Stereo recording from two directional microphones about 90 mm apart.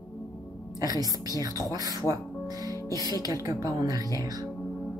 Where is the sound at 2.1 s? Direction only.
40° right (ahead or behind).